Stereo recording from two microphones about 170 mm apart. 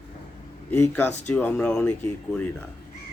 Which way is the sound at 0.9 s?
10° left (ahead or behind).